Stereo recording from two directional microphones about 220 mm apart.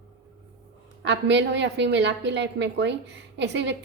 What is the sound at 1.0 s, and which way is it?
A woman's voice, 50° right (ahead or behind).